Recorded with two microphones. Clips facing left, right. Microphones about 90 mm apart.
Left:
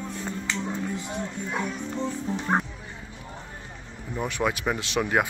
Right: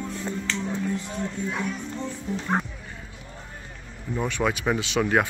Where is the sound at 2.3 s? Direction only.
30° left (ahead or behind).